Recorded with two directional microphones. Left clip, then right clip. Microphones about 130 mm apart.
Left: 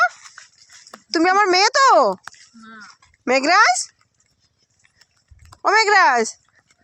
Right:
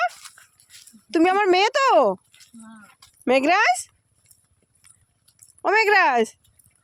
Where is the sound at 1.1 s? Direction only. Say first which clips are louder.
Left 2 dB; 25° right (ahead or behind).